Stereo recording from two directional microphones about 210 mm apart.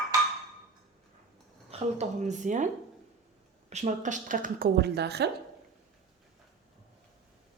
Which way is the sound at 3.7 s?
35° right (ahead or behind).